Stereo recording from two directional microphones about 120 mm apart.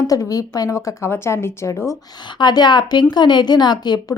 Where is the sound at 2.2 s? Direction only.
40° left (ahead or behind).